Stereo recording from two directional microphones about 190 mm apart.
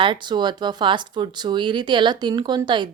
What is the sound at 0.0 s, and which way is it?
A woman's voice, 25° right (ahead or behind).